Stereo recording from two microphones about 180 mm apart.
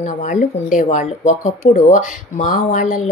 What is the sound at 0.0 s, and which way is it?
A woman's voice, 45° left (ahead or behind).